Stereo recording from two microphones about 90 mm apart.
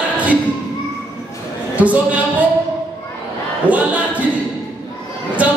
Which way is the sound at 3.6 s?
15° right (ahead or behind).